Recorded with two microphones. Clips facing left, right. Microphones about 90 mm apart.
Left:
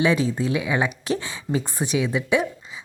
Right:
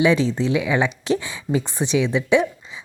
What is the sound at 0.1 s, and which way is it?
Speech, 15° left (ahead or behind).